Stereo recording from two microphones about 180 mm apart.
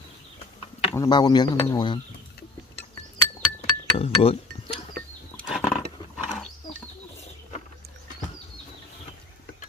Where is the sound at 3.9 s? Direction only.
30° left (ahead or behind).